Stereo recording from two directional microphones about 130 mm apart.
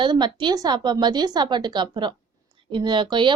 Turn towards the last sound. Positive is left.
turn(degrees=-40)  # may be behind; listen again after turning